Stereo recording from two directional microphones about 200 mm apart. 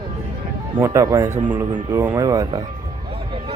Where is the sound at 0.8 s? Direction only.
15° right (ahead or behind).